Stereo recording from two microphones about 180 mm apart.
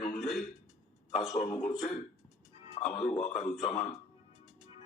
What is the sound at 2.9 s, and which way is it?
Speech, 35° left (ahead or behind).